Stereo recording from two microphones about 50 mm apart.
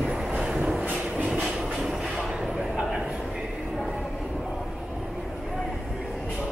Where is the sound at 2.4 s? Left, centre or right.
Centre.